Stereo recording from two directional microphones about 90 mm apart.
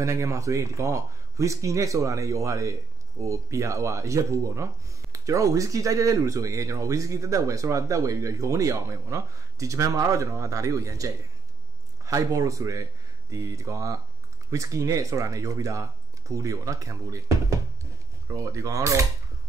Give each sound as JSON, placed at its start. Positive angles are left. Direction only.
{"t": 0.0, "sound": "speech", "side_deg": -35}